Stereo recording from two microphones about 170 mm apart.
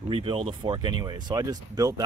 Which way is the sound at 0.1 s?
30° right (ahead or behind).